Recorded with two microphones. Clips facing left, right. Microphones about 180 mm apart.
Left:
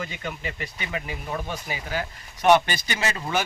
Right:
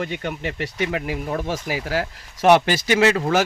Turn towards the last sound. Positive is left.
turn(degrees=-75)  # may be behind; listen again after turning